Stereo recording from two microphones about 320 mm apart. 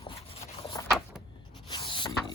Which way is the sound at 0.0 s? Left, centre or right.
Centre.